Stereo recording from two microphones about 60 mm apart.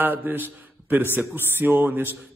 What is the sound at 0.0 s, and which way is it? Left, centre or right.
A man's voice, right.